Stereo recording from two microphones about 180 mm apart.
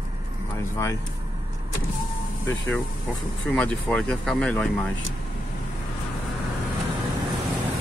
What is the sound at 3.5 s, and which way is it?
Speech, 5° left (ahead or behind).